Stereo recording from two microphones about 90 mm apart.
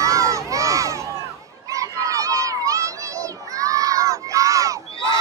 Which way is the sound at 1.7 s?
40° right (ahead or behind).